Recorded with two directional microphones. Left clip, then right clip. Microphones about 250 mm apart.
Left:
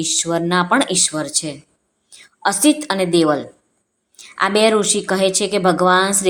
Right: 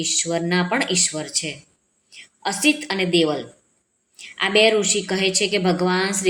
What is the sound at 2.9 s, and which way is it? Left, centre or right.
Speech, left.